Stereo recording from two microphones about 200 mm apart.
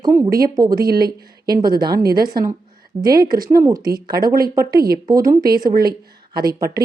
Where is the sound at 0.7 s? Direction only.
50° right (ahead or behind).